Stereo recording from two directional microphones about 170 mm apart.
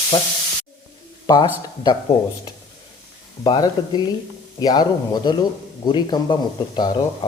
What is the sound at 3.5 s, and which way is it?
Speech, 25° left (ahead or behind).